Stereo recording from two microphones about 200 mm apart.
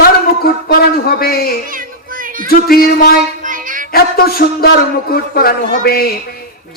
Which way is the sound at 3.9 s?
50° left (ahead or behind).